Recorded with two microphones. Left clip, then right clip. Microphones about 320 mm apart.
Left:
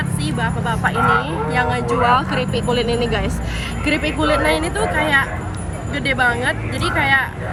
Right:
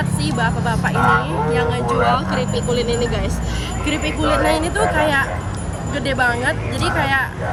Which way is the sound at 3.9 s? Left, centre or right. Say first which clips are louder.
Left 2 dB; centre.